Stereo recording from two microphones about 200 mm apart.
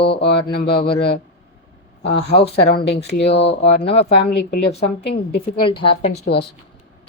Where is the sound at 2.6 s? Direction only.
55° left (ahead or behind).